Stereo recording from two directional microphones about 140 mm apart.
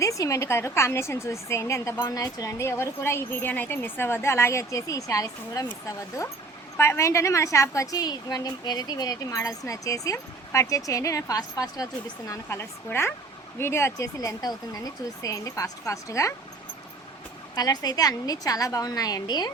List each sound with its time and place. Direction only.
0.0 s a woman's voice: 25° left (ahead or behind)
6.7 s a woman's voice: 20° left (ahead or behind)
17.5 s a woman's voice: 30° left (ahead or behind)